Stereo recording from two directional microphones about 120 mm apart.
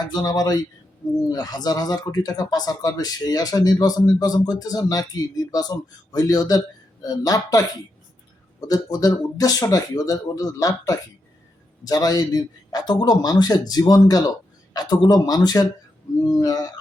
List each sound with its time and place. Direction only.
0.0 s speech: 35° left (ahead or behind)
8.6 s speech: 30° left (ahead or behind)